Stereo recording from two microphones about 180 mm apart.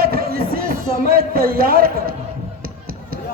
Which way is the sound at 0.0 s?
55° right (ahead or behind).